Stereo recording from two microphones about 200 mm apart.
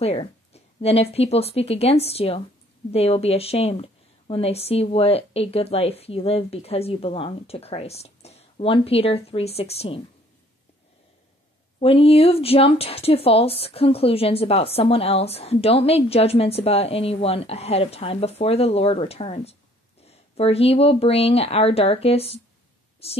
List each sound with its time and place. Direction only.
0.0 s a sound: 30° left (ahead or behind)
1.1 s speech: 30° left (ahead or behind)
11.8 s a woman's voice: 30° left (ahead or behind)